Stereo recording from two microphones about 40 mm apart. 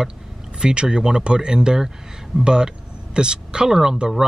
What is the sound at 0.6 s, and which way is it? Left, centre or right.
Speech, right.